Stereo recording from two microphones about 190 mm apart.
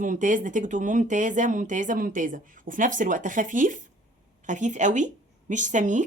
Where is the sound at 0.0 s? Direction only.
45° right (ahead or behind).